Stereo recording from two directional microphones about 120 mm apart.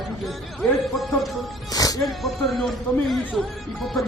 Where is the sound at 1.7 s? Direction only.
30° left (ahead or behind).